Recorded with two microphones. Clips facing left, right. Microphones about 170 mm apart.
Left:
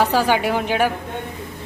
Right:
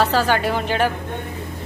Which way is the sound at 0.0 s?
15° left (ahead or behind).